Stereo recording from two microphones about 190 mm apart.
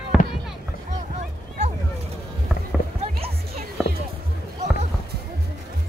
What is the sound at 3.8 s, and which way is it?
Music, centre (ahead or behind).